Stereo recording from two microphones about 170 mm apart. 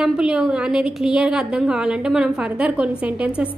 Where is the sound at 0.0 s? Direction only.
5° right (ahead or behind).